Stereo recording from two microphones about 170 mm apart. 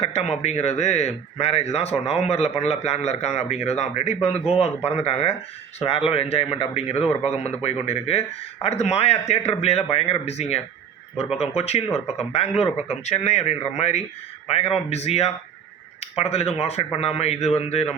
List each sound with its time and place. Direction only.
0.0 s speech: 40° left (ahead or behind)